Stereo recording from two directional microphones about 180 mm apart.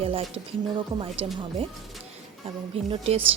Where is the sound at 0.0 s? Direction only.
30° right (ahead or behind).